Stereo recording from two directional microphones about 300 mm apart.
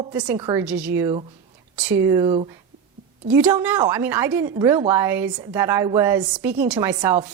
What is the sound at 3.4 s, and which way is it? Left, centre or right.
Speech, centre.